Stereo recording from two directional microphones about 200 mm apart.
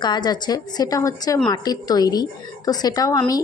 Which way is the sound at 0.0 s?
20° left (ahead or behind).